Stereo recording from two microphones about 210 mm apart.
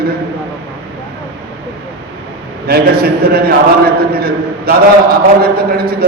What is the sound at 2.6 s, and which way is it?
A man's voice, 45° right (ahead or behind).